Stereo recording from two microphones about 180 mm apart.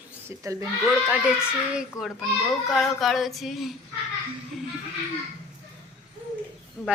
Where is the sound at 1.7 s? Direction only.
Centre (ahead or behind).